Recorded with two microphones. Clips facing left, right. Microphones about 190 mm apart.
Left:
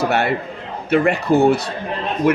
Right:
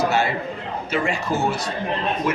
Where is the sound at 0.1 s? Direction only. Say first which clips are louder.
Left 3 dB; 60° left (ahead or behind).